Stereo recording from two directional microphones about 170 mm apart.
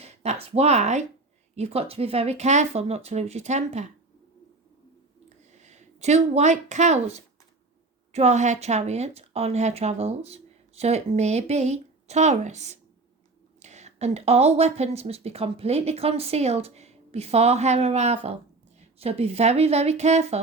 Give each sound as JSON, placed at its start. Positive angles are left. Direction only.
{"t": 0.0, "sound": "speech", "side_deg": -40}
{"t": 5.5, "sound": "speech", "side_deg": -45}